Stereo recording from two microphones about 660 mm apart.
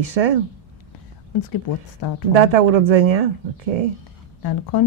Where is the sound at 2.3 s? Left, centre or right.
Right.